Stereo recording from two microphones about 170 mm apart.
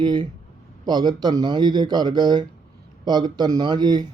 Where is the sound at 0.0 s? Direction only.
25° right (ahead or behind).